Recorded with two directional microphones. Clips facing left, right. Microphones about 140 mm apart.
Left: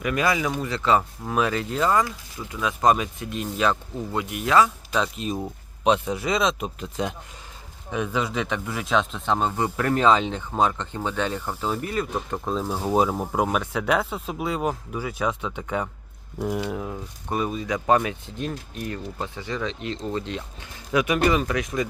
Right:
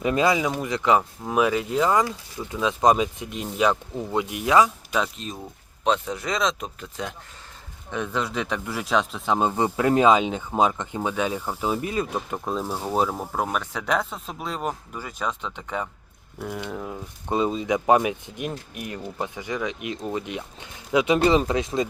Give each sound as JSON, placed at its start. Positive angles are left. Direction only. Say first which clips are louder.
{"t": 0.0, "sound": "speech", "louder": "right 2 dB", "side_deg": -25}
{"t": 5.1, "sound": "speech", "louder": "left 7 dB", "side_deg": 10}
{"t": 6.7, "sound": "speech", "louder": "left 5 dB", "side_deg": 20}
{"t": 7.9, "sound": "speech", "louder": "left 1 dB", "side_deg": 5}
{"t": 9.4, "sound": "speech", "louder": "right 3 dB", "side_deg": -15}
{"t": 12.5, "sound": "speech", "louder": "left 2 dB", "side_deg": -5}
{"t": 12.8, "sound": "speech", "louder": "left 4 dB", "side_deg": 5}
{"t": 17.2, "sound": "speech", "louder": "right 3 dB", "side_deg": -20}